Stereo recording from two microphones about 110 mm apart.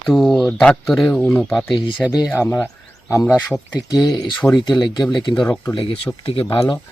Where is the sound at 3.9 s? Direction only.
35° left (ahead or behind).